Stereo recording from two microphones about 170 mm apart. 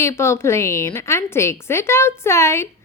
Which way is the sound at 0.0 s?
15° left (ahead or behind).